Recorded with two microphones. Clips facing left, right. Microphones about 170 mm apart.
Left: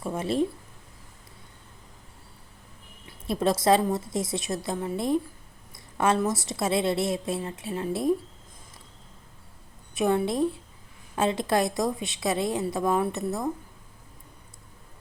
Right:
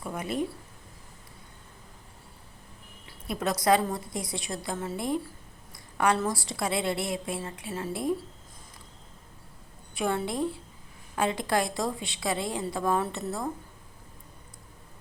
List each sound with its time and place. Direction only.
0.0 s speech: 25° left (ahead or behind)
3.1 s a woman's voice: 25° left (ahead or behind)
9.9 s a woman's voice: 20° left (ahead or behind)